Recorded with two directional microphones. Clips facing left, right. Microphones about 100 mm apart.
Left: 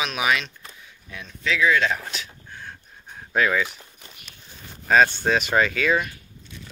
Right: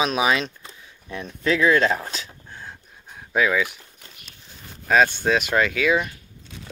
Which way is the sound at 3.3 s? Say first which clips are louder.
Right 1 dB; 5° right (ahead or behind).